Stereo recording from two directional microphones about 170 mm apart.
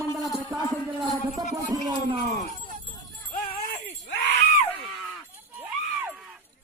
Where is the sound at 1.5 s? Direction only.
20° right (ahead or behind).